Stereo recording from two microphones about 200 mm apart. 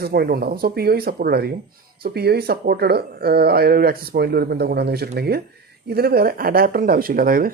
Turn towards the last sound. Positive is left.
turn(degrees=-45)  # may be behind; listen again after turning